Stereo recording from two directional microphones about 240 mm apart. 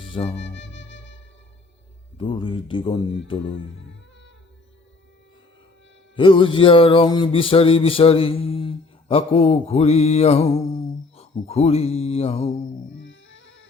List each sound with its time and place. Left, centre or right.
0.3 s music: left
2.1 s music: centre
6.1 s music: left
11.1 s mantra: left
13.0 s music: left